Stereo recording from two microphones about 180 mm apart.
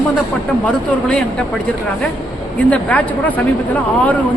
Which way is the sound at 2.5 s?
10° left (ahead or behind).